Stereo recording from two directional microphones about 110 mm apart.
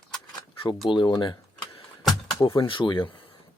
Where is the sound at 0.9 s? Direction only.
45° left (ahead or behind).